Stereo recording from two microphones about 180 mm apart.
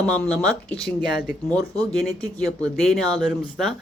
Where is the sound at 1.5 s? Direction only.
20° right (ahead or behind).